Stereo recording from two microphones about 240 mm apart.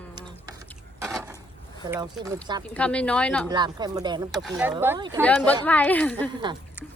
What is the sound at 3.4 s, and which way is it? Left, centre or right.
Speech, centre.